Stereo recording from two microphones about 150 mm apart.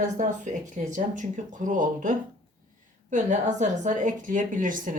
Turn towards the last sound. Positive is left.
turn(degrees=-65)  # may be behind; listen again after turning